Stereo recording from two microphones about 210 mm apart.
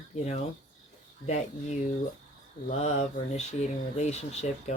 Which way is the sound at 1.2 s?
30° left (ahead or behind).